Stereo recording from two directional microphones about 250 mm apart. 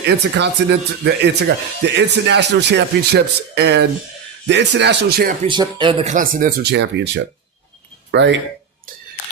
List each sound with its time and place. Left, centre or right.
0.0 s speech: right
5.5 s speech: centre; by 8.4 s right